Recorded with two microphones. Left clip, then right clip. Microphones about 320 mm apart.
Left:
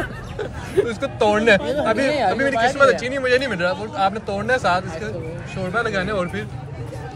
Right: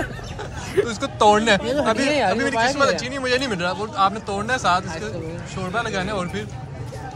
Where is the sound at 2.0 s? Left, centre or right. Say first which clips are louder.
Left 1 dB; right.